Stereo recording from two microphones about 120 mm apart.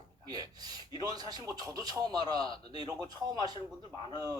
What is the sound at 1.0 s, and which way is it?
Speech, 35° right (ahead or behind).